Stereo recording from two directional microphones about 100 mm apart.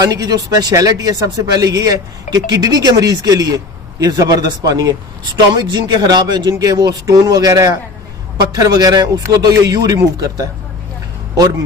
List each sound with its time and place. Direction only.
0.0 s a man's voice: 35° right (ahead or behind)